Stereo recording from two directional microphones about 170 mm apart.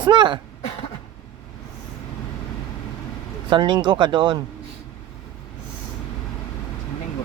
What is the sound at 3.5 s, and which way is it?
Speech, 25° right (ahead or behind).